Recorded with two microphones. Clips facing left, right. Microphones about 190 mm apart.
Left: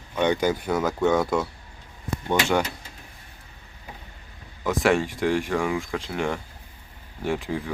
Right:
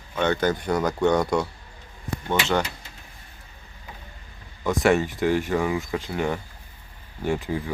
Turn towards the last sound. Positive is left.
turn(degrees=0)  # may be behind; listen again after turning